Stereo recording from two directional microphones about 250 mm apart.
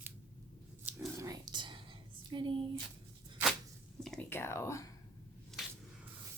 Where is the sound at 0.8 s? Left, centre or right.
Centre.